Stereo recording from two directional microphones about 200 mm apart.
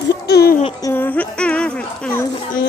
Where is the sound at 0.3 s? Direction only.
50° left (ahead or behind).